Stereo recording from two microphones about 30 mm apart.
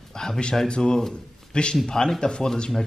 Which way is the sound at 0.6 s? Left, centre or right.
Left.